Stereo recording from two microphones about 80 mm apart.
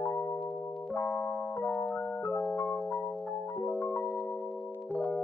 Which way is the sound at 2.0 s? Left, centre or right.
Left.